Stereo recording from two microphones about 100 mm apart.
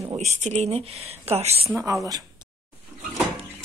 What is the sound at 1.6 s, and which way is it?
Speech, 30° right (ahead or behind).